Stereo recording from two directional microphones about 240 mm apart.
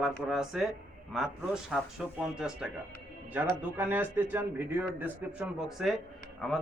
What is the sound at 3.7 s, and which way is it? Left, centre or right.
A man's voice, centre.